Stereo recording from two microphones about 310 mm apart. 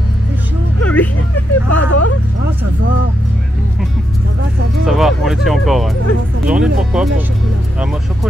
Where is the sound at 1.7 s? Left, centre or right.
Left.